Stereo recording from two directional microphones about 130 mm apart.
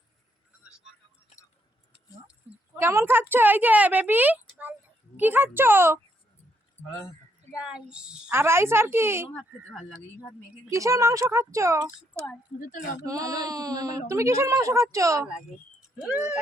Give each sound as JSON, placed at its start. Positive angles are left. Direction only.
{"t": 2.7, "sound": "a woman's voice", "side_deg": -20}
{"t": 7.5, "sound": "a woman's voice", "side_deg": -5}
{"t": 8.3, "sound": "a child's voice", "side_deg": -20}
{"t": 10.7, "sound": "a child's voice", "side_deg": -25}
{"t": 13.0, "sound": "a child's voice", "side_deg": -25}
{"t": 16.0, "sound": "a woman's voice", "side_deg": -10}